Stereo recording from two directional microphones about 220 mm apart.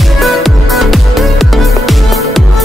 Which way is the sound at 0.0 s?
Centre (ahead or behind).